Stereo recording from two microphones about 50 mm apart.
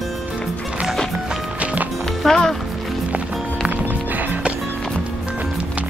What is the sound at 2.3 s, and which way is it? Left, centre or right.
Speech, centre.